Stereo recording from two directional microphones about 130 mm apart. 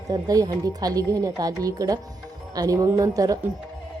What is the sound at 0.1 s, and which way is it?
A woman's voice, 30° right (ahead or behind).